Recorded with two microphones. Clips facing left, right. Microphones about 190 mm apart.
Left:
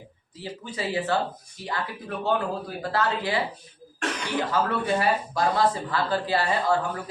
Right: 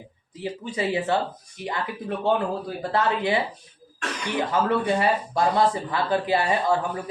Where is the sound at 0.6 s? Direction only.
20° right (ahead or behind).